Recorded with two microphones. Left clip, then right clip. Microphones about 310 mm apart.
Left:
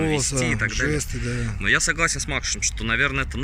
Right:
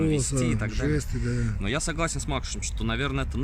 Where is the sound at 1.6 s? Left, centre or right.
Centre.